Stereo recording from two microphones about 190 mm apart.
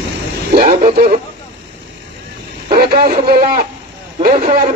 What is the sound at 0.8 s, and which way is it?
Speech, 55° right (ahead or behind).